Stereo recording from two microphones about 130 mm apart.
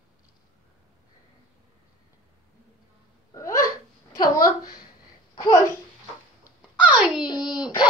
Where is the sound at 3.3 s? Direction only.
25° left (ahead or behind).